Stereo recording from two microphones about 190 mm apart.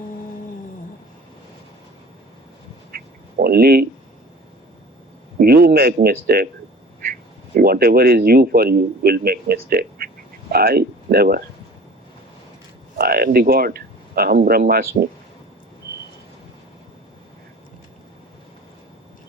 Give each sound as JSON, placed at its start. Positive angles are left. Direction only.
{"t": 2.9, "sound": "duck", "side_deg": -55}
{"t": 5.4, "sound": "a man's voice", "side_deg": -50}
{"t": 13.0, "sound": "speech", "side_deg": -55}